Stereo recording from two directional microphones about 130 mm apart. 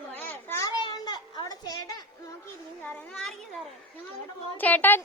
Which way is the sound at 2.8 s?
10° left (ahead or behind).